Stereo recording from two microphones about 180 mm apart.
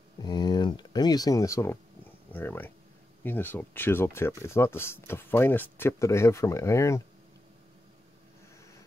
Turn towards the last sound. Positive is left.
turn(degrees=15)  # may be behind; listen again after turning